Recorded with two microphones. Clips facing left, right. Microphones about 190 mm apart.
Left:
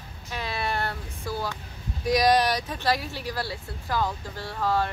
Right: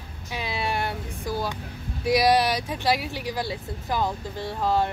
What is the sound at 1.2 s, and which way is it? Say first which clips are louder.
Speech: right 2 dB; 15° right (ahead or behind).